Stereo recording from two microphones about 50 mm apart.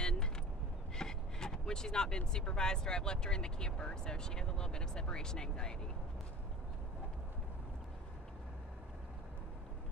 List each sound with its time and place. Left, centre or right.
0.0 s vehicle: centre
0.9 s speech: centre